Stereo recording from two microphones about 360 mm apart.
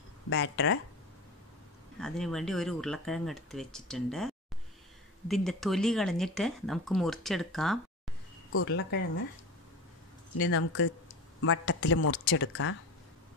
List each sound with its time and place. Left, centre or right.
0.3 s speech: left
2.0 s speech: centre
8.5 s speech: left
10.3 s speech: left